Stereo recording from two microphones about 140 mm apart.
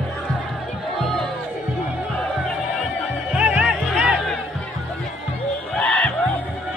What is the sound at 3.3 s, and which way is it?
Music, 10° right (ahead or behind).